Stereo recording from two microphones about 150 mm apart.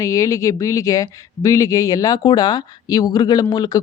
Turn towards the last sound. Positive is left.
turn(degrees=25)  # may be behind; listen again after turning